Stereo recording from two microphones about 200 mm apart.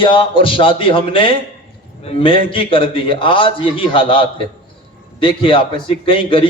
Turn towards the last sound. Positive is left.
turn(degrees=25)  # may be behind; listen again after turning